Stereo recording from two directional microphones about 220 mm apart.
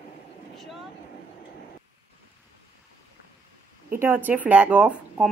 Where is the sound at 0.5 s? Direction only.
Centre (ahead or behind).